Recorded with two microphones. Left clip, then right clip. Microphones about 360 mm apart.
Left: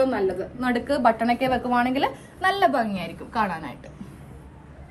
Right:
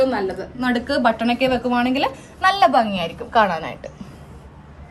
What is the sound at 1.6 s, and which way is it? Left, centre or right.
Speech, right.